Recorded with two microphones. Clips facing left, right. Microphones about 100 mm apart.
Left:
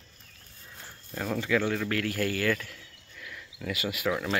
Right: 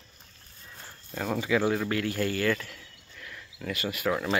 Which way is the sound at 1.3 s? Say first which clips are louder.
Right 2 dB; 10° right (ahead or behind).